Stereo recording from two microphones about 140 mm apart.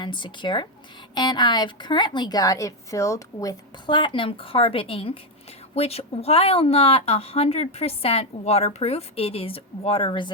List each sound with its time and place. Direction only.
0.0 s a woman's voice: 35° left (ahead or behind)
3.8 s a woman's voice: 35° left (ahead or behind)